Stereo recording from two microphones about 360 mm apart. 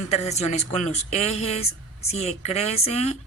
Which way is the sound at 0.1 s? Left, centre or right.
Centre.